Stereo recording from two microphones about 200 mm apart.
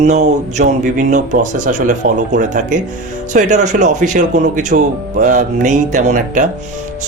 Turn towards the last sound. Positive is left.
turn(degrees=-35)  # may be behind; listen again after turning